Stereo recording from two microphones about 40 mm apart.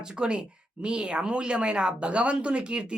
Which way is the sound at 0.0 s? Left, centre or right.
Right.